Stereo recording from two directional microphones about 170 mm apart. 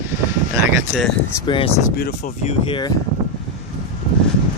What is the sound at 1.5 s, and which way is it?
Speech, 30° left (ahead or behind).